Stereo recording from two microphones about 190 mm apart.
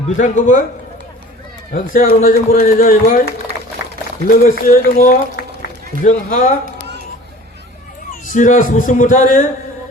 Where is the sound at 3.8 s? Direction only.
65° left (ahead or behind).